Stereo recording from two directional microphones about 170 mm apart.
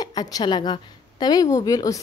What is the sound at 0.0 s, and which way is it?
A woman's voice, 20° left (ahead or behind).